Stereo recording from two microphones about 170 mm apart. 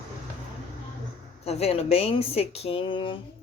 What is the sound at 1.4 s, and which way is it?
Speech, 35° left (ahead or behind).